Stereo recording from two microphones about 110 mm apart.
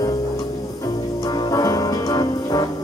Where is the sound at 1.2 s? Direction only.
35° left (ahead or behind).